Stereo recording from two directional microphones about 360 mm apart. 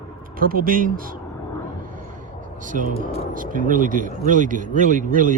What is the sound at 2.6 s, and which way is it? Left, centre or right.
Speech, right.